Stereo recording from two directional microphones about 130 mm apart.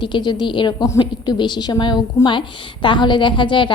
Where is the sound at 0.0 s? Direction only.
35° left (ahead or behind).